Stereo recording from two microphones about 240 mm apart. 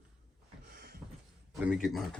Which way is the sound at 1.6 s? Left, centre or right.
Centre.